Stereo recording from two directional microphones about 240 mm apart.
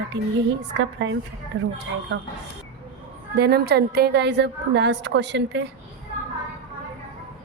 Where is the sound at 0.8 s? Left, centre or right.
Right.